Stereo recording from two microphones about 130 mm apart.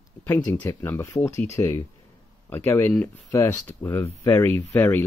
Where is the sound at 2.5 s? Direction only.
15° left (ahead or behind).